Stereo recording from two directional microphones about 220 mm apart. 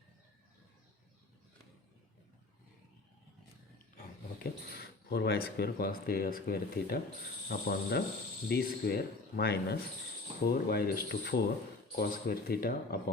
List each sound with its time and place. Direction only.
4.8 s speech: 50° left (ahead or behind)